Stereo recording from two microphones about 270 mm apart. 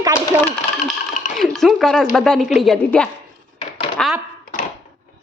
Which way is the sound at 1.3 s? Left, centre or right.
Centre.